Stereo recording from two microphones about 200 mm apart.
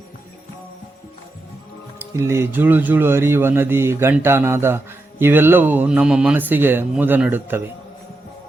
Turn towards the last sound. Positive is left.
turn(degrees=-10)  # may be behind; listen again after turning